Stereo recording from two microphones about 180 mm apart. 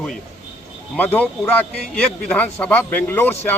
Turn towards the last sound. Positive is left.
turn(degrees=10)  # may be behind; listen again after turning